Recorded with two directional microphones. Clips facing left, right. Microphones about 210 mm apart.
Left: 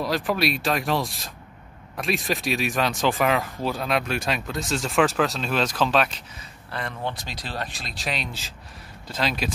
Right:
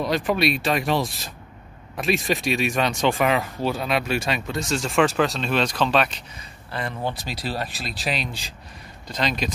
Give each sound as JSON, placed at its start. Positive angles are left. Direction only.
{"t": 0.0, "sound": "speech", "side_deg": 0}